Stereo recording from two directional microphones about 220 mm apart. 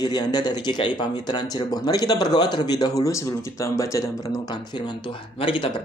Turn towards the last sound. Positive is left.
turn(degrees=25)  # may be behind; listen again after turning